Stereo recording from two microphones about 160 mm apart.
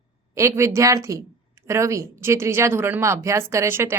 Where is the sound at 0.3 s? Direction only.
20° right (ahead or behind).